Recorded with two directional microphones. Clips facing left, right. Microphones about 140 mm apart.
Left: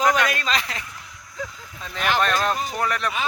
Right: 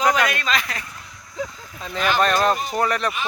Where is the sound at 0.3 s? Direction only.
35° left (ahead or behind).